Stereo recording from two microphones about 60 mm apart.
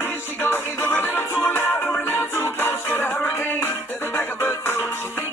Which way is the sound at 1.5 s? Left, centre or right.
Left.